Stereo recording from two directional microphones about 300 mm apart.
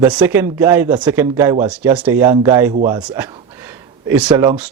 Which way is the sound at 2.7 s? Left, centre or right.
Centre.